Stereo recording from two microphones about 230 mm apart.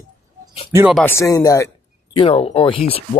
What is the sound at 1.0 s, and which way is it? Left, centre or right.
Speech, centre.